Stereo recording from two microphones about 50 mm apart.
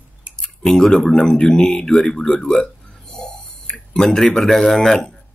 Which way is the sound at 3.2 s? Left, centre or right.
Centre.